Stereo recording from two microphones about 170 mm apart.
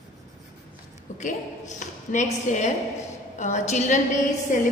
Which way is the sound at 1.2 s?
45° left (ahead or behind).